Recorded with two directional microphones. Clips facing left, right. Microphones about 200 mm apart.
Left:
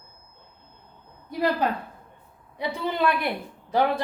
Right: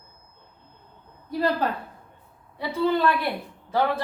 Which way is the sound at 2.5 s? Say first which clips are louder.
Right 5 dB; 15° left (ahead or behind).